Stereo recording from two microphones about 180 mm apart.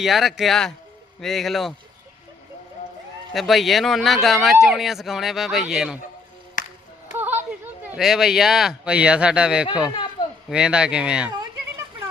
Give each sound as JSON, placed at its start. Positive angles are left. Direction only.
{"t": 0.0, "sound": "speech", "side_deg": 0}
{"t": 3.3, "sound": "speech", "side_deg": 0}
{"t": 6.6, "sound": "music", "side_deg": 45}
{"t": 7.2, "sound": "speech", "side_deg": -10}
{"t": 9.9, "sound": "a sound", "side_deg": 25}
{"t": 10.5, "sound": "speech", "side_deg": -5}